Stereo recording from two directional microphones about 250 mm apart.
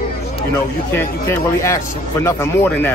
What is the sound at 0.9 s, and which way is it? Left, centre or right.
Speech, centre.